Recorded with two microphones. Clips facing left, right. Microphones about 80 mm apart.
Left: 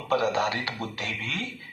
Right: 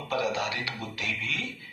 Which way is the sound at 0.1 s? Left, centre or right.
Left.